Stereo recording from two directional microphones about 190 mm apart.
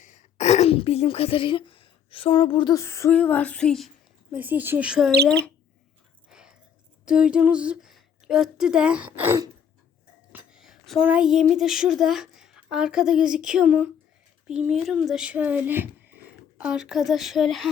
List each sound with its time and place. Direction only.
0.0 s speech: 40° left (ahead or behind); by 5.1 s 5° right (ahead or behind)
6.3 s a sound: 5° right (ahead or behind)
7.0 s speech: 5° right (ahead or behind)